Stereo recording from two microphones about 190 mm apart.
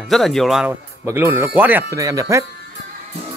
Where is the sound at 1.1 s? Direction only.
10° right (ahead or behind).